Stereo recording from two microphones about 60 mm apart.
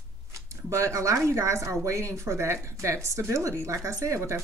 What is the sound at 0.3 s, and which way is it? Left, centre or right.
Speech, right.